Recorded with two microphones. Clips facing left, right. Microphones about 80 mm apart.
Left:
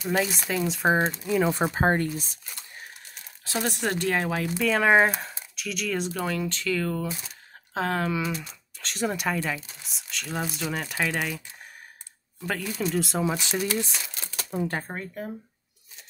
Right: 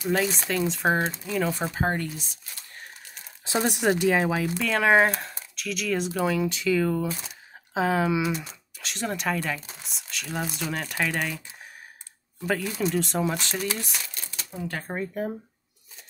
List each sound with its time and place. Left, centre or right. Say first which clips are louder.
0.1 s speech: even; centre
1.5 s speech: left 4 dB; left
3.4 s speech: right 4 dB; centre
8.8 s speech: left 1 dB; centre
12.4 s speech: right 3 dB; centre
14.5 s speech: left 6 dB; left
14.9 s speech: right 5 dB; centre